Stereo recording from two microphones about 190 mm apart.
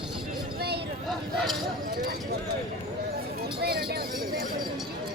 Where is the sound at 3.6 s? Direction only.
55° right (ahead or behind).